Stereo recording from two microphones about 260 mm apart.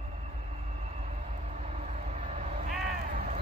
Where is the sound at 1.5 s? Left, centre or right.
Right.